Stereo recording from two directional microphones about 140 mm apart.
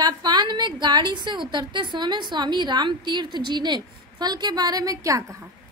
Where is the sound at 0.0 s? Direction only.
30° right (ahead or behind).